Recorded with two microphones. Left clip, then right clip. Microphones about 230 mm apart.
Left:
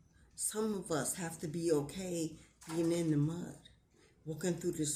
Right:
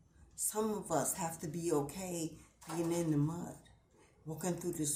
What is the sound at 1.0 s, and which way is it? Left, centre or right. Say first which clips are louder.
Speech: right 2 dB; centre.